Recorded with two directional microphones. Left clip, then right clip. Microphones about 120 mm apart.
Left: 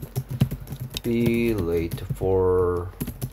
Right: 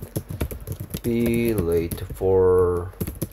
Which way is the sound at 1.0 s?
30° right (ahead or behind).